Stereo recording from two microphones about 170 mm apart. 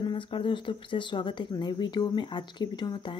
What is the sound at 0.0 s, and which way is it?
Speech, 30° left (ahead or behind).